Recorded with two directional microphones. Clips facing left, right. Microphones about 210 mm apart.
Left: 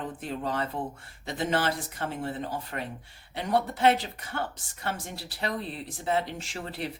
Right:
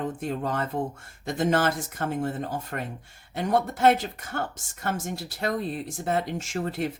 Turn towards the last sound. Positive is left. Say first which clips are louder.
# right 7 dB
turn(degrees=-45)  # may be behind; listen again after turning